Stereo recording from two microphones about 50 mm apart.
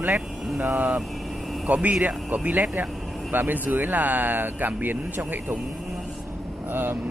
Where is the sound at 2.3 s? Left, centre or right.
Right.